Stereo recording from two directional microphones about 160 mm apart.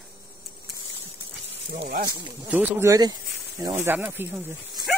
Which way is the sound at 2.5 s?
10° right (ahead or behind).